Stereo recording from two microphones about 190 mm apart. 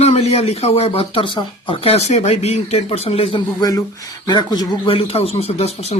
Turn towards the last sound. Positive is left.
turn(degrees=35)  # may be behind; listen again after turning